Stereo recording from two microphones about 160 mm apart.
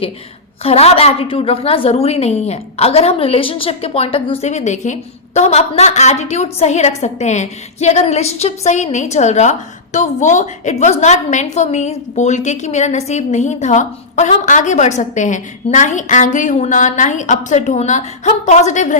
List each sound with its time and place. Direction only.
0.6 s a woman's voice: 40° left (ahead or behind)